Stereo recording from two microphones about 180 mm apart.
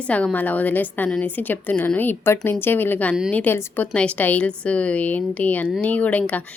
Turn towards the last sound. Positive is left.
turn(degrees=10)  # may be behind; listen again after turning